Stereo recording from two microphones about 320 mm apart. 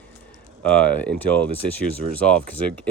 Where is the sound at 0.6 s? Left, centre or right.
Centre.